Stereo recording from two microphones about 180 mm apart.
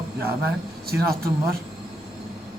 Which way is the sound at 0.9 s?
55° right (ahead or behind).